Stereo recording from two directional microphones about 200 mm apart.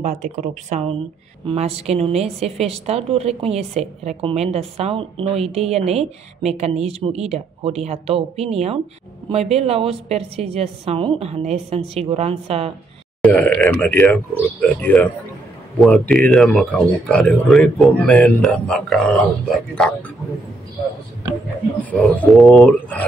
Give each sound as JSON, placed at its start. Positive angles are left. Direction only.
{"t": 0.0, "sound": "a woman's voice", "side_deg": -35}
{"t": 13.2, "sound": "speech", "side_deg": 10}
{"t": 21.9, "sound": "speech", "side_deg": 5}